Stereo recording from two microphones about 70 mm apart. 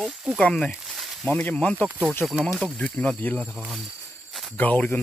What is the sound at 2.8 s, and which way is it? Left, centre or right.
Speech, centre.